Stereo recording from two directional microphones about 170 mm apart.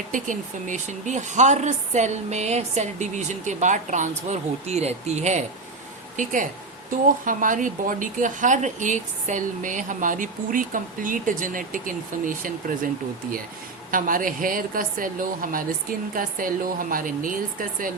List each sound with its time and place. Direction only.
0.1 s a woman's voice: 45° right (ahead or behind)
13.9 s a woman's voice: 55° right (ahead or behind)